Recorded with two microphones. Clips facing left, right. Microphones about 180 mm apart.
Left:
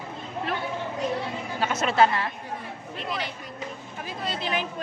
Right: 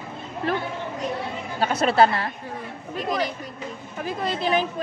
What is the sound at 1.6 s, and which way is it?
A woman's voice, 35° right (ahead or behind).